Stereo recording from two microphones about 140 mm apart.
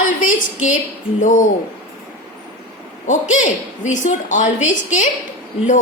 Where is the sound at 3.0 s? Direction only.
60° left (ahead or behind).